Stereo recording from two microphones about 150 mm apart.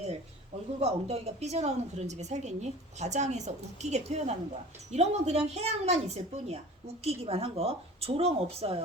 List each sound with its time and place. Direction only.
0.8 s speech: 45° right (ahead or behind)